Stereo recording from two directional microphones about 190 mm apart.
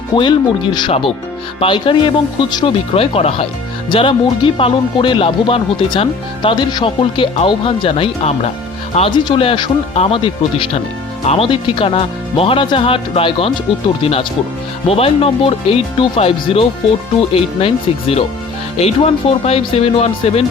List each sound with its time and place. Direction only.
0.1 s speech: 25° left (ahead or behind)